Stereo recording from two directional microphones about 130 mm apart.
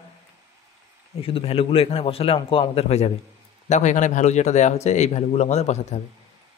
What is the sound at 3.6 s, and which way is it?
Speech, 65° left (ahead or behind).